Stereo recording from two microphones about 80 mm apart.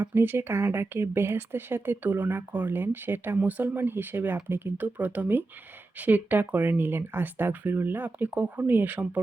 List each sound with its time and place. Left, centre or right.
0.0 s speech: right